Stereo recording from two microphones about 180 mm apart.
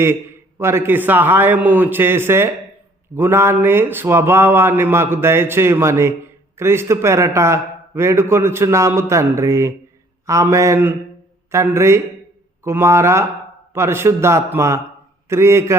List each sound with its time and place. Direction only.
0.6 s speech: 15° right (ahead or behind)